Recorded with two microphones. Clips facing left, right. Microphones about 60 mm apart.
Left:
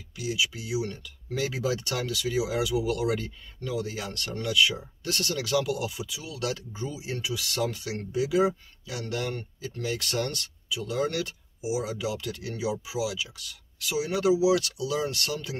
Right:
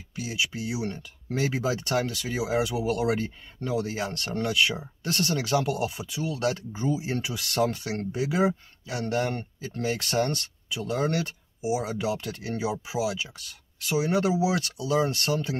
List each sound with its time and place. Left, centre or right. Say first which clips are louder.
0.1 s speech: left 1 dB; right